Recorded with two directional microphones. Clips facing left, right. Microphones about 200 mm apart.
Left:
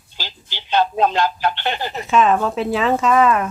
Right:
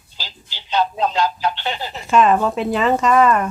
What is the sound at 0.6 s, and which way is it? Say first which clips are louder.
Speech: left 2 dB; 55° left (ahead or behind).